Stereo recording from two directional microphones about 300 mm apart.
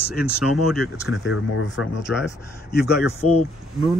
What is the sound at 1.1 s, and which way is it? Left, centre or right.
Speech, left.